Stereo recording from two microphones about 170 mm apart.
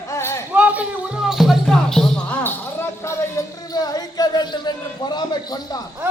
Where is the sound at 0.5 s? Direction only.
10° right (ahead or behind).